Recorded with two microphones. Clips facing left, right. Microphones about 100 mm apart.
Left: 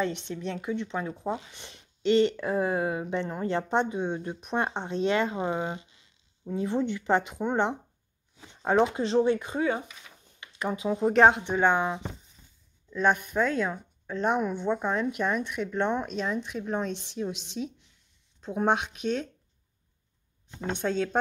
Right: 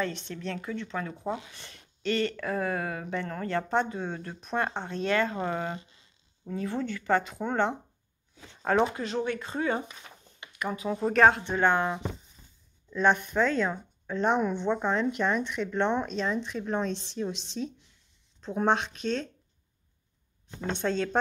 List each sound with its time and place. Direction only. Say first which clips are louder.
0.0 s speech: left 2 dB; 20° left (ahead or behind)
8.4 s a sound: left 1 dB; 20° left (ahead or behind)
8.9 s speech: left 7 dB; 30° left (ahead or behind)
9.4 s speech: left 1 dB; 10° left (ahead or behind)
10.5 s speech: left 2 dB; 25° left (ahead or behind)
20.6 s speech: left 1 dB; 10° left (ahead or behind)